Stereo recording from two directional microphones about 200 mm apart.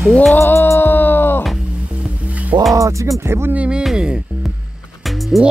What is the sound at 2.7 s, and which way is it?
Speech, 15° right (ahead or behind).